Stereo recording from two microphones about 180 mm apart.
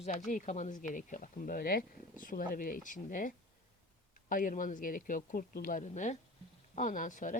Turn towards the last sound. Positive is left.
turn(degrees=45)  # may be behind; listen again after turning